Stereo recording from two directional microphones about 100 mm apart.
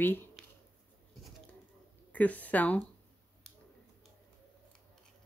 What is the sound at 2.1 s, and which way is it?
Speech, 15° left (ahead or behind).